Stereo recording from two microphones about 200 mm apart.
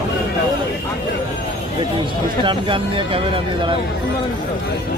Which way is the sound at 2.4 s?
25° right (ahead or behind).